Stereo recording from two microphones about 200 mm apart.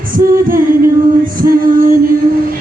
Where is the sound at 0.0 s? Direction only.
45° right (ahead or behind).